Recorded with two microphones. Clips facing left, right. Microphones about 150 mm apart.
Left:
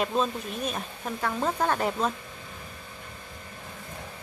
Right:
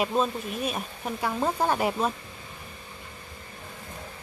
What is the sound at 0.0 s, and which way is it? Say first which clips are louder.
Speech: right 1 dB; 5° right (ahead or behind).